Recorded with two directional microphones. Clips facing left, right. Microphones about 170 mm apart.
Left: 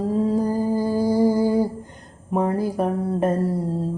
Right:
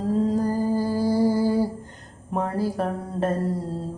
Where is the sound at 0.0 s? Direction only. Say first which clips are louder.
Left 2 dB; 10° left (ahead or behind).